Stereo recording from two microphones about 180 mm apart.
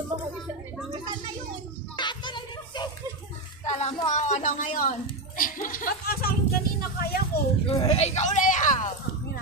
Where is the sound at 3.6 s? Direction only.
35° left (ahead or behind).